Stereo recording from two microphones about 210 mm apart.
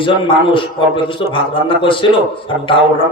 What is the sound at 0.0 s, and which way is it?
A man's voice, 25° left (ahead or behind).